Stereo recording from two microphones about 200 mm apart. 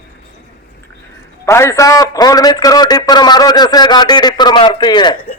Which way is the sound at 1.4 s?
15° left (ahead or behind).